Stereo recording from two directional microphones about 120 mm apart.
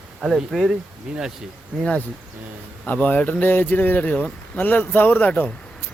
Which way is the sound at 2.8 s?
15° left (ahead or behind).